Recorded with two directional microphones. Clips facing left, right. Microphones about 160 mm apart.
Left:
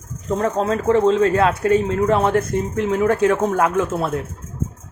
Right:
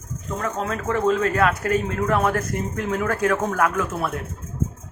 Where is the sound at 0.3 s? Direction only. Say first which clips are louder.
Left 7 dB; 30° left (ahead or behind).